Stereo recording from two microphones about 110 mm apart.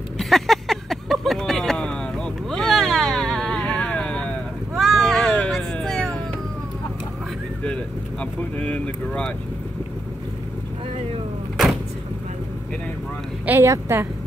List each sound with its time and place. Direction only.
0.2 s a sound: centre (ahead or behind)
4.7 s cat: centre (ahead or behind)
7.6 s vehicle: 10° left (ahead or behind)
13.5 s a woman's voice: 25° right (ahead or behind)